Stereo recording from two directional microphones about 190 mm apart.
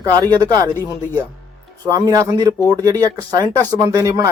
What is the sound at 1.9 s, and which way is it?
Speech, 15° right (ahead or behind).